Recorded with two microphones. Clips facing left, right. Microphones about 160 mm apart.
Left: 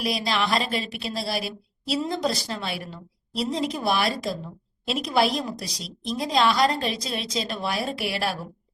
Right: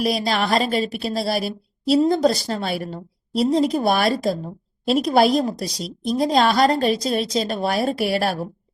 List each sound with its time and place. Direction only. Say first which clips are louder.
0.0 s a woman's voice: right 5 dB; 40° right (ahead or behind)